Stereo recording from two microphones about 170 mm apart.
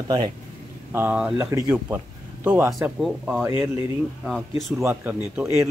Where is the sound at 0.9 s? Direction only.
10° right (ahead or behind).